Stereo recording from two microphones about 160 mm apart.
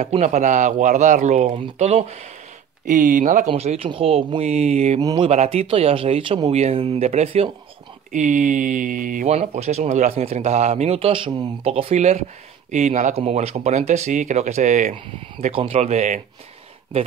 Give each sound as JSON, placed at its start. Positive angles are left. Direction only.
{"t": 0.0, "sound": "speech", "side_deg": -45}
{"t": 2.8, "sound": "speech", "side_deg": -50}
{"t": 4.5, "sound": "speech", "side_deg": -45}
{"t": 5.0, "sound": "speech", "side_deg": -30}
{"t": 5.3, "sound": "speech", "side_deg": -40}